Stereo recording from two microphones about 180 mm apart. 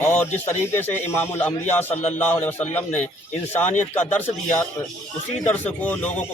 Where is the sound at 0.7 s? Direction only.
10° left (ahead or behind).